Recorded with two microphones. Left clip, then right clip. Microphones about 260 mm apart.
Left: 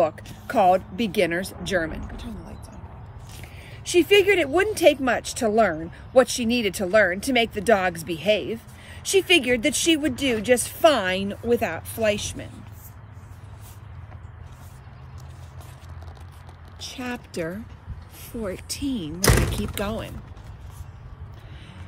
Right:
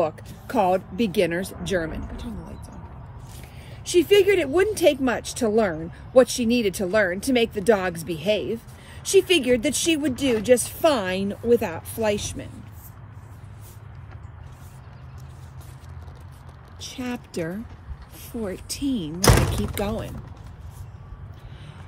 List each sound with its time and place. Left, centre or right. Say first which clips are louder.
0.0 s speech: left 2 dB; centre
3.3 s a sound: left 4 dB; centre
4.7 s speech: left 2 dB; centre
16.9 s speech: even; centre
19.2 s speech: right 2 dB; right
19.7 s speech: right 1 dB; centre